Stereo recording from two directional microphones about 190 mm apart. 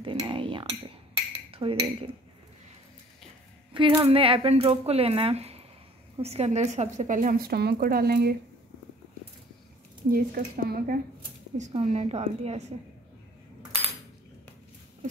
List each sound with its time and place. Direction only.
0.0 s cutlery: 25° right (ahead or behind)
1.5 s speech: 30° right (ahead or behind)
3.7 s a woman's voice: 25° right (ahead or behind); by 8.4 s 55° right (ahead or behind)
10.1 s a woman's voice: 50° right (ahead or behind)
11.5 s speech: 40° right (ahead or behind)